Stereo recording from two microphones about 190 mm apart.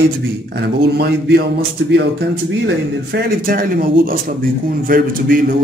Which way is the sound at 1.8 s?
70° right (ahead or behind).